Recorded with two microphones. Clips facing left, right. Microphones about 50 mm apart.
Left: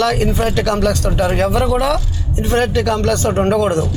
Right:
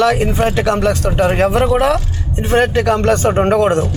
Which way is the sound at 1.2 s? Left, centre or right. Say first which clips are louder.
Right 3 dB; right.